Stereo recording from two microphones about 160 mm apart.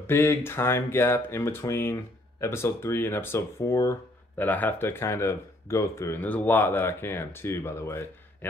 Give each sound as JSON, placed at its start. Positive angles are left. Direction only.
{"t": 0.0, "sound": "speech", "side_deg": 15}